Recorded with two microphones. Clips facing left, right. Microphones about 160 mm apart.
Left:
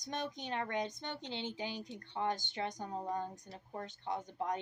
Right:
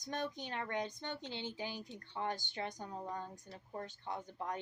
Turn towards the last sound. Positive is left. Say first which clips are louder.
# left 4 dB
turn(degrees=20)  # may be behind; listen again after turning